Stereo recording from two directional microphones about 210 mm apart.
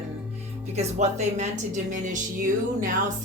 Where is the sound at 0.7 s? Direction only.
30° right (ahead or behind).